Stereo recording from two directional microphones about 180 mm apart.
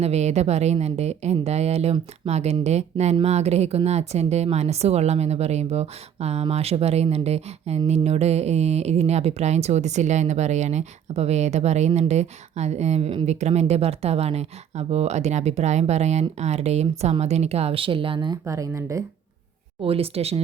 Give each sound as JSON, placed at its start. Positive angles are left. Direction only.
{"t": 0.0, "sound": "a woman's voice", "side_deg": -35}
{"t": 19.8, "sound": "a woman's voice", "side_deg": -35}